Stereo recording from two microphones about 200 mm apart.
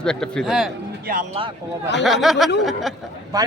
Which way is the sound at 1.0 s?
40° right (ahead or behind).